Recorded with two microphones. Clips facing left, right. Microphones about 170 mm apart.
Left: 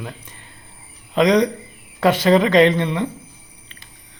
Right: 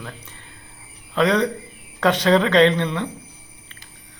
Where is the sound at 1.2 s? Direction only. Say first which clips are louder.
Left 3 dB; 15° left (ahead or behind).